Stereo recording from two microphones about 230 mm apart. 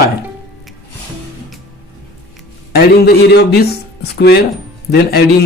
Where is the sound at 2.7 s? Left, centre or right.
Left.